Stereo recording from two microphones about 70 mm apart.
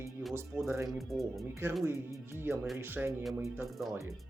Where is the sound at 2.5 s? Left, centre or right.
Right.